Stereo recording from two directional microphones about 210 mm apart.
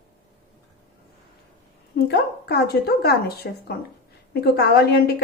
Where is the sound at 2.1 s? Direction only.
50° left (ahead or behind).